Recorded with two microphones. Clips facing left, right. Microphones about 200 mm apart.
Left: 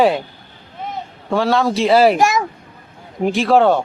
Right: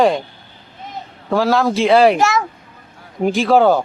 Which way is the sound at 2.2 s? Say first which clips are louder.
Left 1 dB; 15° left (ahead or behind).